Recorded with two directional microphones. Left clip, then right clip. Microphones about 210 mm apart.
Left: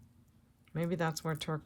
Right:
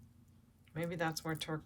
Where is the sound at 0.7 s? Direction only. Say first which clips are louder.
Left 3 dB; 30° left (ahead or behind).